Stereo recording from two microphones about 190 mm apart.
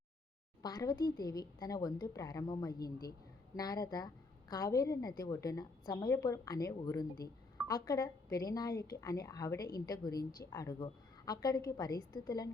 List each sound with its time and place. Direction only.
0.6 s a woman's voice: 20° left (ahead or behind)